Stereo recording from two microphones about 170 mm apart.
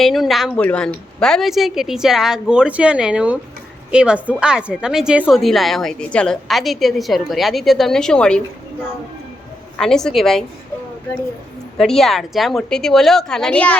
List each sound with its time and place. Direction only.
0.0 s speech: centre (ahead or behind)
9.7 s speech: 5° left (ahead or behind)
11.8 s speech: centre (ahead or behind)